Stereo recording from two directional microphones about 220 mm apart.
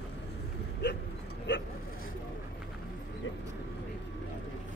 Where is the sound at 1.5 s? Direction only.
55° left (ahead or behind).